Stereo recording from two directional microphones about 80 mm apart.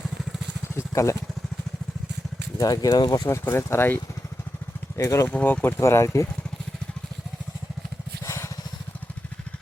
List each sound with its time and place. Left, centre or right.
0.7 s a sound: left
2.6 s speech: left
3.4 s speech: left
4.9 s speech: left
5.3 s speech: centre
5.8 s speech: left
8.2 s vehicle: left